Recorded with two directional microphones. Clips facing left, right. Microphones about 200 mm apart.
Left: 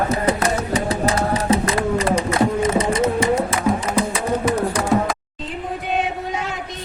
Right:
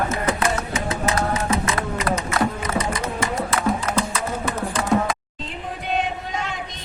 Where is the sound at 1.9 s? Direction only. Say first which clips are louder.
Left 4 dB; 30° left (ahead or behind).